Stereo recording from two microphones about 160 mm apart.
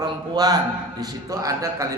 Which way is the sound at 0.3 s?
25° right (ahead or behind).